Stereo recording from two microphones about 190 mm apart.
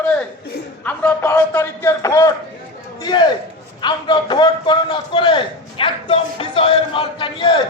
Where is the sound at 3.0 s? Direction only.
20° left (ahead or behind).